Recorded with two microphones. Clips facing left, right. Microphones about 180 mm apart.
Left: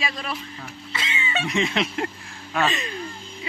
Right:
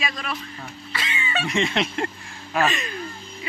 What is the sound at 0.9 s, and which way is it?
Music, 20° left (ahead or behind).